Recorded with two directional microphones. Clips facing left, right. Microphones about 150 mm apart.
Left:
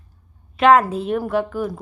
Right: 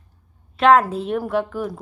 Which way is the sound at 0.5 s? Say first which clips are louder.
Left 1 dB; centre (ahead or behind).